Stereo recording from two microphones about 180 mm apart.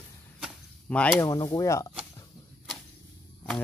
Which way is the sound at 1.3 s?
20° left (ahead or behind).